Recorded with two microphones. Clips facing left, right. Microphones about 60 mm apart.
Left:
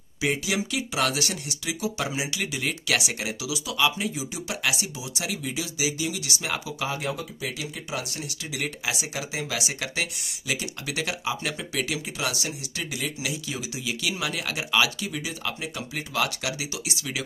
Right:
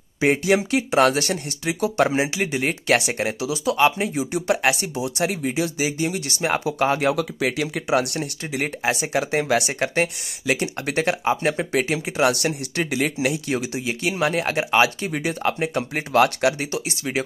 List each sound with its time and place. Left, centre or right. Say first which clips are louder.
0.2 s speech: right 8 dB; right
2.4 s speech: right 7 dB; right
8.8 s speech: right 9 dB; right